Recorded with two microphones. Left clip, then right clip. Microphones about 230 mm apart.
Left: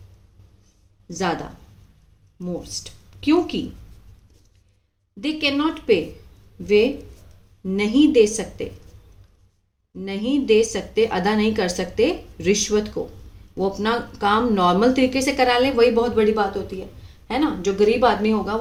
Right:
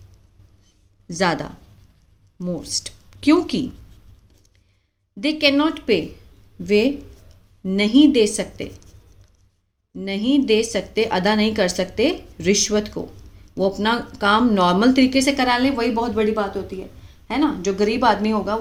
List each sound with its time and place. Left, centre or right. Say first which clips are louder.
1.0 s a woman's voice: right 4 dB; right
5.2 s a woman's voice: right 4 dB; right
10.0 s a woman's voice: right 3 dB; right